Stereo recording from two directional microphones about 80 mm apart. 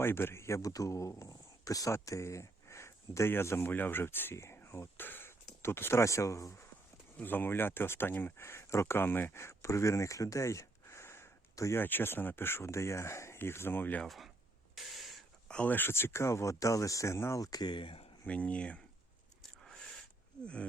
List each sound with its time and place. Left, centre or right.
0.0 s speech: left
7.2 s speech: left
11.8 s speech: left
14.0 s speech: centre
14.8 s a sound: centre
15.4 s a sound: centre
15.7 s speech: left
17.6 s speech: left
18.3 s speech: centre
20.4 s speech: centre